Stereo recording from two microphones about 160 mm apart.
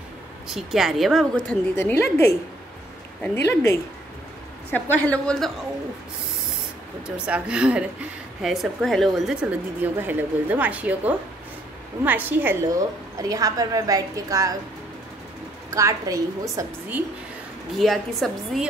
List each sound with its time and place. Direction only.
0.5 s a woman's voice: 5° right (ahead or behind); by 2.3 s 15° left (ahead or behind)
4.6 s speech: 10° left (ahead or behind)
7.2 s speech: 5° right (ahead or behind)
13.2 s a woman's voice: 20° right (ahead or behind)
15.7 s a woman's voice: 20° right (ahead or behind)
17.7 s a woman's voice: centre (ahead or behind)